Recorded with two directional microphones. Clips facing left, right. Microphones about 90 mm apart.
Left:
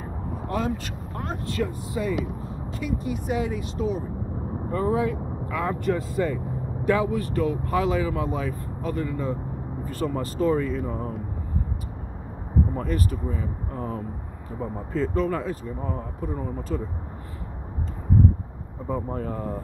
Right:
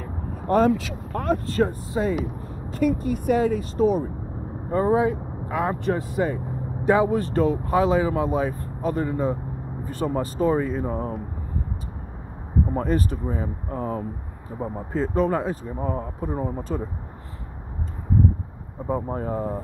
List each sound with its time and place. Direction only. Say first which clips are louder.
0.7 s speech: right 7 dB; 60° right (ahead or behind)
1.5 s speech: right 5 dB; 35° right (ahead or behind)
2.4 s speech: right 9 dB; 45° right (ahead or behind)
4.6 s speech: right 4 dB; 30° right (ahead or behind)
9.8 s speech: right 3 dB; 20° right (ahead or behind)
12.7 s speech: right 4 dB; 30° right (ahead or behind)
14.6 s speech: right 1 dB; 25° right (ahead or behind)
18.9 s speech: right 3 dB; 15° right (ahead or behind)